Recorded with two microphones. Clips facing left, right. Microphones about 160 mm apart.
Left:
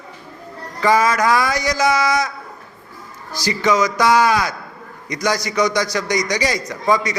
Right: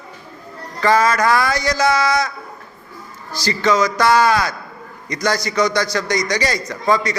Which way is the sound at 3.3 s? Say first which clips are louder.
Even; 15° left (ahead or behind).